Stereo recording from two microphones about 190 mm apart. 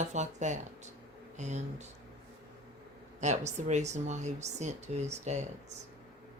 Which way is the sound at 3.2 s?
40° right (ahead or behind).